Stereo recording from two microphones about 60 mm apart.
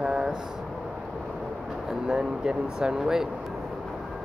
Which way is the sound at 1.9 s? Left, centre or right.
Centre.